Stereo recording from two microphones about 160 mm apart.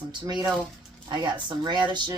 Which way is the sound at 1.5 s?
30° right (ahead or behind).